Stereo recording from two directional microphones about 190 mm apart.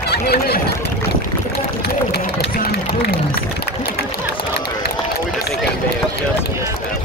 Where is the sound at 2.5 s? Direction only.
55° left (ahead or behind).